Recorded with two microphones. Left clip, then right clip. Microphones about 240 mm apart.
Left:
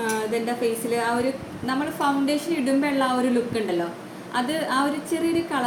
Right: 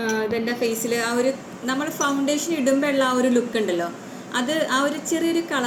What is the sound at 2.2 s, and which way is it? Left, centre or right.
A woman's voice, centre.